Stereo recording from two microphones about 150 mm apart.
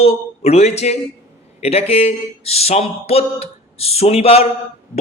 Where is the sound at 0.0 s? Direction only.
40° left (ahead or behind).